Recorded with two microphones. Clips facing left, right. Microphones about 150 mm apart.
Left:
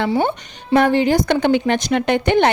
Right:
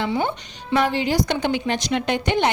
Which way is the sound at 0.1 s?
45° left (ahead or behind).